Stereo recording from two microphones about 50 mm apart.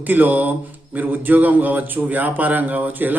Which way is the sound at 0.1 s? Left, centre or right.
Right.